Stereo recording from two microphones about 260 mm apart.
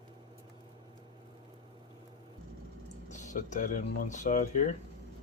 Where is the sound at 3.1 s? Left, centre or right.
Left.